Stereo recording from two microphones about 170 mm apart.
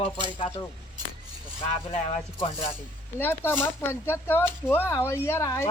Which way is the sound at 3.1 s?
15° left (ahead or behind).